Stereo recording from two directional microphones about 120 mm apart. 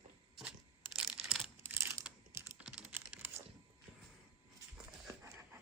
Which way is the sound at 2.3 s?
20° right (ahead or behind).